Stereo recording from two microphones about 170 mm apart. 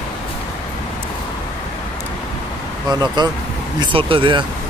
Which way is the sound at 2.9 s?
25° right (ahead or behind).